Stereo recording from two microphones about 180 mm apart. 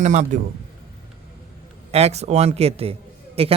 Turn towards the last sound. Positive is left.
turn(degrees=-35)  # may be behind; listen again after turning